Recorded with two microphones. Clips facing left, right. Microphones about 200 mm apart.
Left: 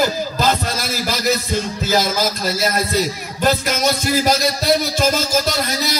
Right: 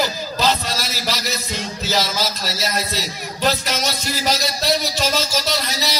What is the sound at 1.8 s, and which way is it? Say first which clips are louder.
A man's voice: left 3 dB; 50° left (ahead or behind).